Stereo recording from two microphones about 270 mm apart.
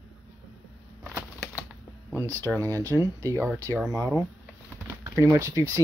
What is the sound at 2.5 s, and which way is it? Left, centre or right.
Speech, centre.